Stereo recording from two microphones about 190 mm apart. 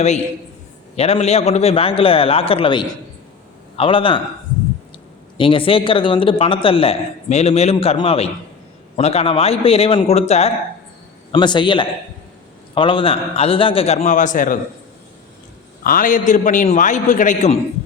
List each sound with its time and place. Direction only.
0.9 s a man's voice: 35° left (ahead or behind)
5.4 s a man's voice: 30° left (ahead or behind)
11.3 s a man's voice: 25° left (ahead or behind); by 14.6 s 45° left (ahead or behind)
15.8 s a man's voice: 45° left (ahead or behind)